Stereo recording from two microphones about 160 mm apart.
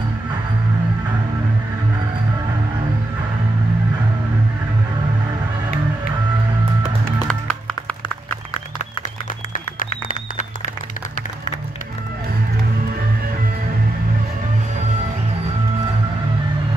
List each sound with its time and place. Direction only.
7.2 s music: 5° left (ahead or behind)
9.5 s music: 55° left (ahead or behind)